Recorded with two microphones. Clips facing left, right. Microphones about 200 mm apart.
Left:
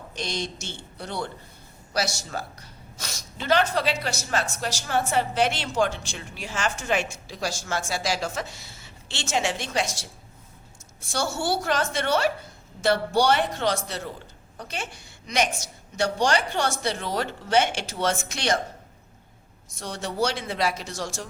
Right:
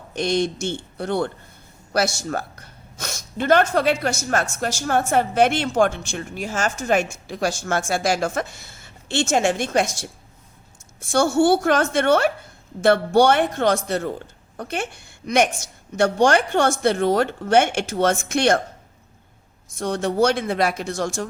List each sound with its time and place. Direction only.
0.1 s a woman's voice: 55° right (ahead or behind)
11.1 s a woman's voice: 50° right (ahead or behind)
19.8 s a woman's voice: 55° right (ahead or behind)